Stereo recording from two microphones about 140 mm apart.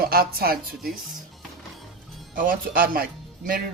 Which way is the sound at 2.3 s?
85° right.